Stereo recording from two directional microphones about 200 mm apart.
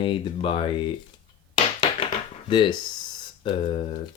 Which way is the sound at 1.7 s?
25° left (ahead or behind).